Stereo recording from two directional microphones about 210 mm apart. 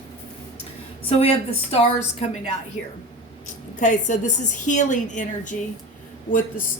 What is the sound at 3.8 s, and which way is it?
A woman's voice, 35° left (ahead or behind).